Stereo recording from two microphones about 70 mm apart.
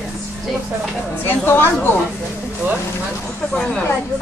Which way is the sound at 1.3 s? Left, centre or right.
Left.